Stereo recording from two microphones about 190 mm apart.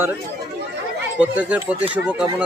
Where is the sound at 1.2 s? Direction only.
10° right (ahead or behind).